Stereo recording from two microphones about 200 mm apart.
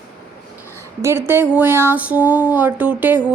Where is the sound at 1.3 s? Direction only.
10° right (ahead or behind).